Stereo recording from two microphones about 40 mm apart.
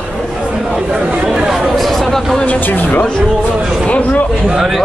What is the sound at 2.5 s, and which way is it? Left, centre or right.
Speech, left.